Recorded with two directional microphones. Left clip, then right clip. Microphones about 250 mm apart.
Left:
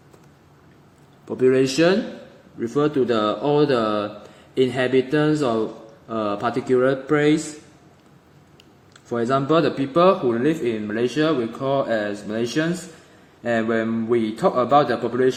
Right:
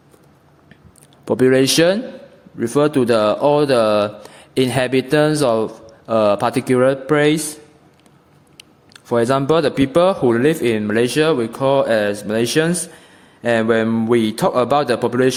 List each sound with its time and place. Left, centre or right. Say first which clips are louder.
1.2 s speech: right 4 dB; right
8.5 s speech: right 8 dB; right